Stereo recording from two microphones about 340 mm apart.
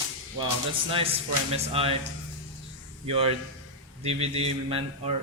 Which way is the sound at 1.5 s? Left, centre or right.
Centre.